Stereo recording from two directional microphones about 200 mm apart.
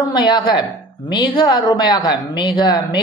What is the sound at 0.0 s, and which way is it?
Speech, 20° left (ahead or behind).